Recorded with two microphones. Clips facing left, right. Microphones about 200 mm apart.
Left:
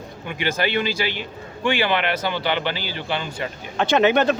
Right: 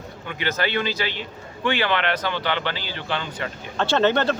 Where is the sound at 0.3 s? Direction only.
15° left (ahead or behind).